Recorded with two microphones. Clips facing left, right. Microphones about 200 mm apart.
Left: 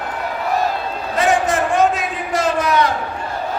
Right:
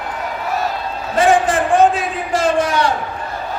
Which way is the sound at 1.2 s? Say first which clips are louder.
Right 3 dB; 30° right (ahead or behind).